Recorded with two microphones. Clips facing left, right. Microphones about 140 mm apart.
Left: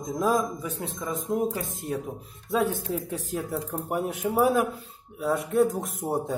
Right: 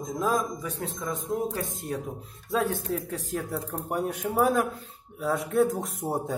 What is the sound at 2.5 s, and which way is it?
Speech, centre (ahead or behind).